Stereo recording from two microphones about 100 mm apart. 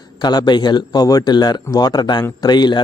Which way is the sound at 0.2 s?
45° left (ahead or behind).